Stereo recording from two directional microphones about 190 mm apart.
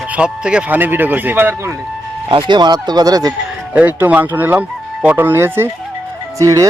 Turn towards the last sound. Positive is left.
turn(degrees=-15)  # may be behind; listen again after turning